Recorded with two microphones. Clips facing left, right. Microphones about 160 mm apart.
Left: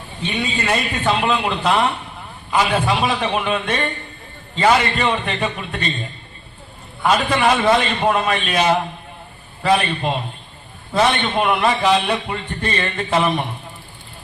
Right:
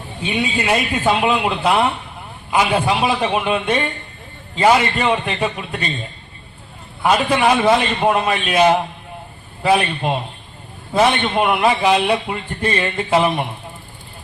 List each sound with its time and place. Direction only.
0.2 s a man's voice: 10° right (ahead or behind)
7.0 s a man's voice: 5° right (ahead or behind)
9.6 s a man's voice: 5° right (ahead or behind)